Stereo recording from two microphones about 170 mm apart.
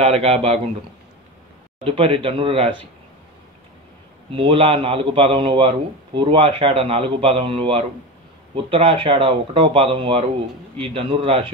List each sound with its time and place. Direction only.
0.0 s a man's voice: 35° right (ahead or behind)
1.9 s a man's voice: 30° right (ahead or behind)
4.3 s a man's voice: 30° right (ahead or behind)